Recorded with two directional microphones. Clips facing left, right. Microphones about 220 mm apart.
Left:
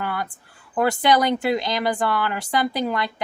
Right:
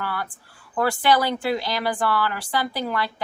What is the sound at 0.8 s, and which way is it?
Speech, 20° left (ahead or behind).